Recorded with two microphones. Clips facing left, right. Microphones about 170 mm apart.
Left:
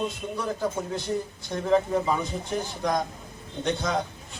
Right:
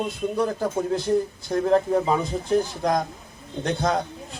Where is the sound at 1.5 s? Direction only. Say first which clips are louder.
Right 3 dB; 50° right (ahead or behind).